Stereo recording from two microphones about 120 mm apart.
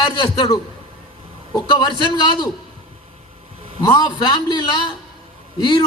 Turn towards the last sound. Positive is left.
turn(degrees=40)  # may be behind; listen again after turning